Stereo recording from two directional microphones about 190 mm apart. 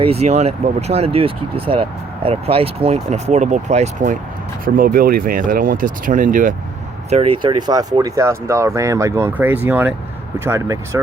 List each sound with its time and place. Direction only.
0.0 s speech: 35° right (ahead or behind)
7.1 s speech: 30° right (ahead or behind); by 11.0 s 15° right (ahead or behind)